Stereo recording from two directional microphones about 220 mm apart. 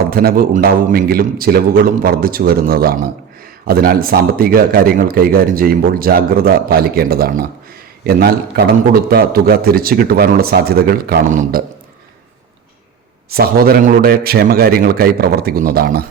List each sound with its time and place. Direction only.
0.1 s speech: 40° right (ahead or behind)
13.3 s speech: 45° right (ahead or behind)